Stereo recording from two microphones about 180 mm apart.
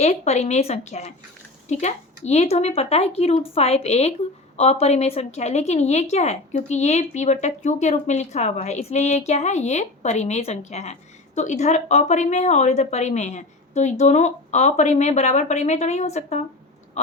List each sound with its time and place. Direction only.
0.0 s a woman's voice: 40° left (ahead or behind)